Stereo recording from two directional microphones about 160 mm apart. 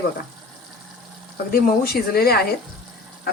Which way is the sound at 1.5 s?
70° left (ahead or behind).